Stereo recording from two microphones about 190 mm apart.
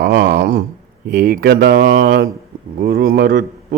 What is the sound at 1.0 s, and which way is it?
A man's voice, 55° right (ahead or behind).